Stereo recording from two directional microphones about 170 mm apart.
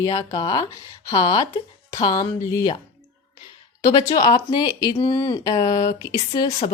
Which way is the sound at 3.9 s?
20° left (ahead or behind).